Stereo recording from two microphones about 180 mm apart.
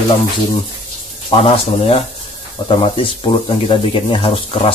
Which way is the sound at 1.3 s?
30° left (ahead or behind).